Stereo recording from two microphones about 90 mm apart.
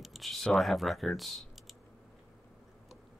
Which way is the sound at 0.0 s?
Centre (ahead or behind).